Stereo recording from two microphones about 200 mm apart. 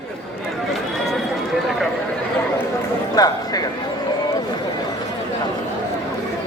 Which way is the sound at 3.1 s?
20° left (ahead or behind).